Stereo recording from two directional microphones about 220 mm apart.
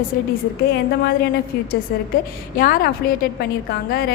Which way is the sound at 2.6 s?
40° left (ahead or behind).